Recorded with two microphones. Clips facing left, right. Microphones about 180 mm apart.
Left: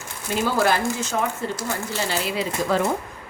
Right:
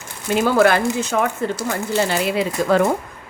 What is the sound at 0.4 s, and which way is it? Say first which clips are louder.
Speech: right 6 dB; 60° right (ahead or behind).